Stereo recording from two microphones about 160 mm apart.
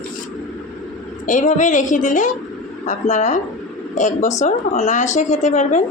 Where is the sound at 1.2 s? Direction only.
50° left (ahead or behind).